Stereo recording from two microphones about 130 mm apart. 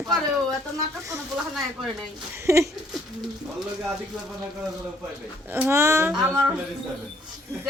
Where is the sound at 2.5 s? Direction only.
20° right (ahead or behind).